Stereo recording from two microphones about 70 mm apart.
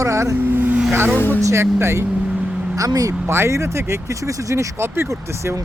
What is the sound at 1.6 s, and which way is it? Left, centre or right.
Speech, right.